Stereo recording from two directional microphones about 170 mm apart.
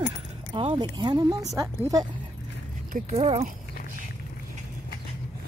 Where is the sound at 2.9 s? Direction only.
40° right (ahead or behind).